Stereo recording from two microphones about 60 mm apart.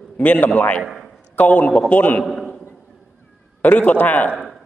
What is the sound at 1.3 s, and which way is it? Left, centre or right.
Speech, left.